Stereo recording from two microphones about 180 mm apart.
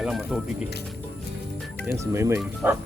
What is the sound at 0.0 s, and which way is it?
Speech, centre (ahead or behind).